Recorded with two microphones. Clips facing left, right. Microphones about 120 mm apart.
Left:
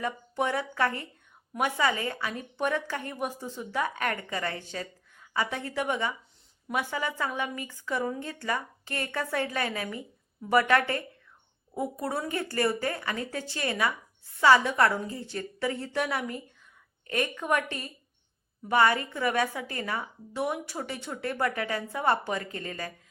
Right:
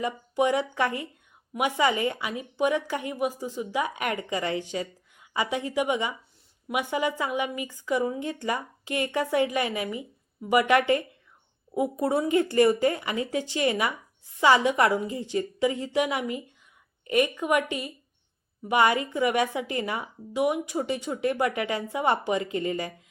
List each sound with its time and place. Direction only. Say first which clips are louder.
0.0 s speech: right 5 dB; 15° right (ahead or behind)